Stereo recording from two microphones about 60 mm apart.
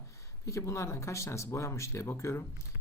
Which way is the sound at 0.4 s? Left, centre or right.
Left.